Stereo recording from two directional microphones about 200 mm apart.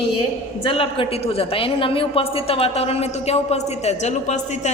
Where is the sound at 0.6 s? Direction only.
25° left (ahead or behind).